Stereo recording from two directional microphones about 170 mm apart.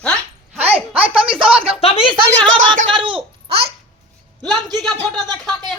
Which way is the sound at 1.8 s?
35° left (ahead or behind).